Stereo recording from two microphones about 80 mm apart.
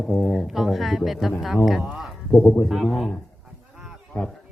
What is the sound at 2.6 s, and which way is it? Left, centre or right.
Speech, centre.